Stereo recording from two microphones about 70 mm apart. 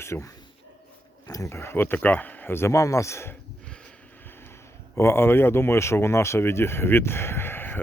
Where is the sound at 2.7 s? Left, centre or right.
Left.